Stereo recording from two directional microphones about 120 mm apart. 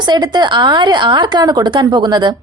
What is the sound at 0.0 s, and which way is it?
A woman's voice, 35° right (ahead or behind).